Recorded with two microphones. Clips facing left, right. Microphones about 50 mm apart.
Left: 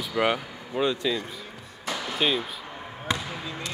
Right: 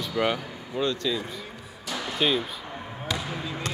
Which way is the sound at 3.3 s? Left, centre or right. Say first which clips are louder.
Right 2 dB; centre.